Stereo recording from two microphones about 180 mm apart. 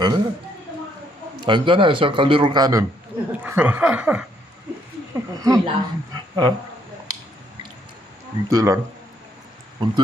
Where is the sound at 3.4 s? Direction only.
10° right (ahead or behind).